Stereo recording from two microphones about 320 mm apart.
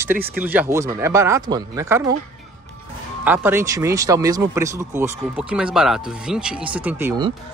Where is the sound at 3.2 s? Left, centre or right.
Centre.